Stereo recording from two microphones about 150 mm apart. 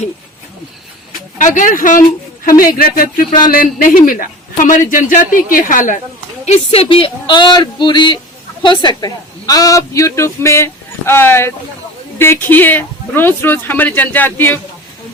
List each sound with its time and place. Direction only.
1.4 s speech: 60° left (ahead or behind)
2.7 s speech: 80° left
3.5 s a man's voice: 70° left (ahead or behind)
6.4 s a woman's voice: 45° left (ahead or behind); by 14.6 s 15° left (ahead or behind)